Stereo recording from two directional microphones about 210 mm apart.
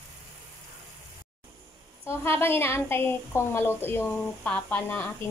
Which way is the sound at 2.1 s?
10° left (ahead or behind).